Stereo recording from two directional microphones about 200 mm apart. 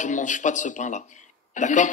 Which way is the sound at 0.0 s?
40° left (ahead or behind).